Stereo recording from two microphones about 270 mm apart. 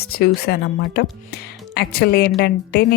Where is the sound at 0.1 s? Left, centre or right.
Left.